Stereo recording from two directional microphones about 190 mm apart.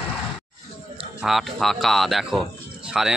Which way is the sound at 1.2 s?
Centre (ahead or behind).